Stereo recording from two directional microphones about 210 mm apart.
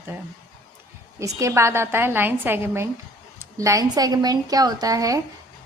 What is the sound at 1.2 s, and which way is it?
A woman's voice, 15° right (ahead or behind).